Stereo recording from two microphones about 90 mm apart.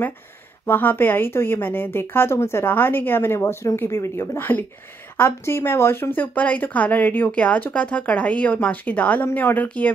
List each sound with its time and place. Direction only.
0.7 s a woman's voice: 25° left (ahead or behind)